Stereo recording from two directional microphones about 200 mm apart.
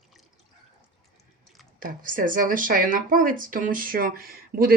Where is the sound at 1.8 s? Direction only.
45° right (ahead or behind).